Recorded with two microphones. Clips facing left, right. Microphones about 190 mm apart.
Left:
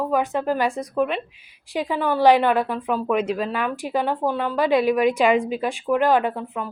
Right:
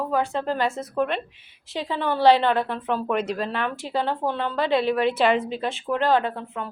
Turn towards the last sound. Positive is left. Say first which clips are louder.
# left 3 dB
turn(degrees=15)  # may be behind; listen again after turning